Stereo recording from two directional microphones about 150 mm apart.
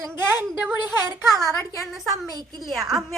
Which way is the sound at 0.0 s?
15° right (ahead or behind).